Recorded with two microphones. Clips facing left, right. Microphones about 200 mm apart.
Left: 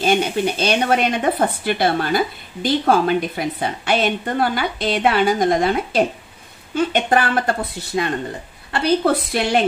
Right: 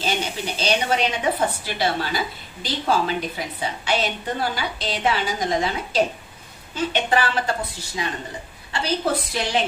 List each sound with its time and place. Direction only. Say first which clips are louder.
0.0 s speech: left 8 dB; 55° left (ahead or behind)